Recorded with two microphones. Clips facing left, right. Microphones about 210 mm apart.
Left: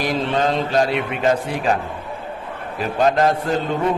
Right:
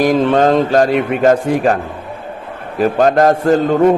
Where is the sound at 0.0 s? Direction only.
50° right (ahead or behind).